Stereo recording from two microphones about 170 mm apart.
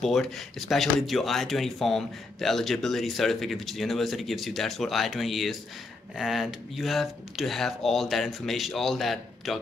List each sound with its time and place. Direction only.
0.0 s speech: centre (ahead or behind)